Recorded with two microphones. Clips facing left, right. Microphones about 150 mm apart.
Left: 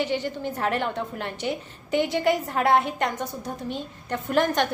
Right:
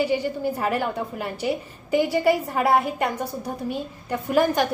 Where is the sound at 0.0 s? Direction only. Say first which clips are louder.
Right 4 dB; 5° right (ahead or behind).